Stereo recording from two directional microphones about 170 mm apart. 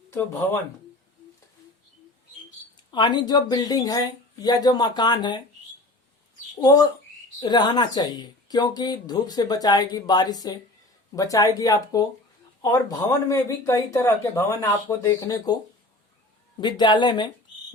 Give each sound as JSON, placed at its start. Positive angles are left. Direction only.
{"t": 2.9, "sound": "speech", "side_deg": 25}
{"t": 6.6, "sound": "speech", "side_deg": 20}